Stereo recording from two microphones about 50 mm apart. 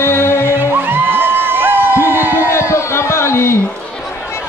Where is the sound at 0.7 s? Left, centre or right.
Right.